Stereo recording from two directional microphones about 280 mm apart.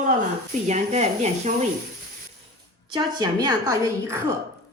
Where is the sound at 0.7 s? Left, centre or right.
Right.